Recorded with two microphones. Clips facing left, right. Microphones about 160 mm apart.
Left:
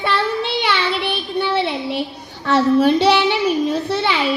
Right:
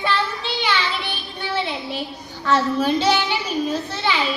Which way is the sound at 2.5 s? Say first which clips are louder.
Left 5 dB; 65° left (ahead or behind).